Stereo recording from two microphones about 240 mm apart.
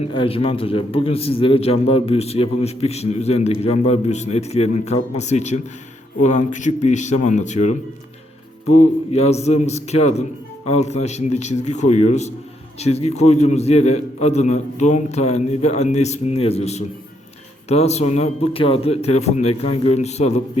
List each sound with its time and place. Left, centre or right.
0.0 s a man's voice: left
9.1 s a man's voice: left